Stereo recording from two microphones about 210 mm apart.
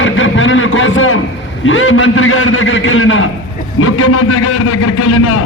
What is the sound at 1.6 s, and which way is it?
A man's voice, 70° left (ahead or behind).